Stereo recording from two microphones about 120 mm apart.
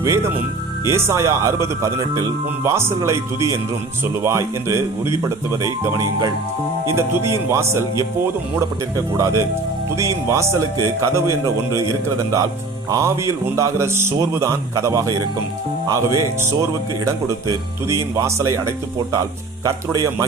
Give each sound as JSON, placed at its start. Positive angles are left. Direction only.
{"t": 0.0, "sound": "speech", "side_deg": -25}
{"t": 9.1, "sound": "speech", "side_deg": -25}
{"t": 12.9, "sound": "speech", "side_deg": -25}